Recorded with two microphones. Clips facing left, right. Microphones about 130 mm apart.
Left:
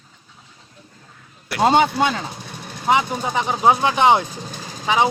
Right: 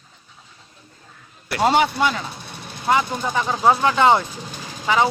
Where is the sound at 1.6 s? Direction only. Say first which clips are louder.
Left 2 dB; 25° left (ahead or behind).